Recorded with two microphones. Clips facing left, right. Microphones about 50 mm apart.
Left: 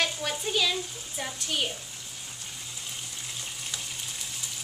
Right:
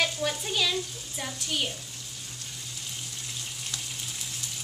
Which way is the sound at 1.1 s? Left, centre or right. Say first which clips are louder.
Even; centre.